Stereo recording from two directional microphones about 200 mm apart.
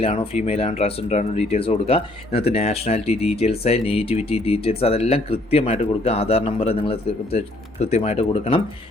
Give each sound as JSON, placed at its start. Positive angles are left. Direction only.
{"t": 0.0, "sound": "speech", "side_deg": 30}